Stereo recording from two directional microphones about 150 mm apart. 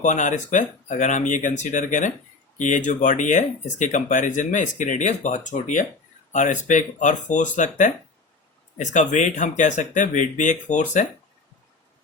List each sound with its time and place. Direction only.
0.0 s speech: 55° left (ahead or behind)